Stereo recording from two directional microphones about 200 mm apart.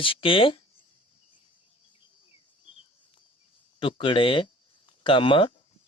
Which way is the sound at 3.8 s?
25° left (ahead or behind).